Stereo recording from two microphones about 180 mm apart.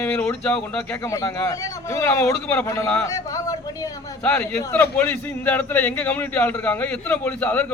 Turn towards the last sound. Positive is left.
turn(degrees=10)  # may be behind; listen again after turning